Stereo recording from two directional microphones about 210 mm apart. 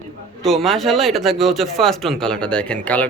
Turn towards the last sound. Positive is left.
turn(degrees=5)  # may be behind; listen again after turning